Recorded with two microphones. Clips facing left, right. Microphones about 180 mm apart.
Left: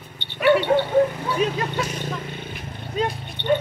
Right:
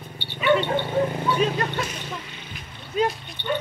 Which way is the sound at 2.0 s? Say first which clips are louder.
Left 6 dB; 50° left (ahead or behind).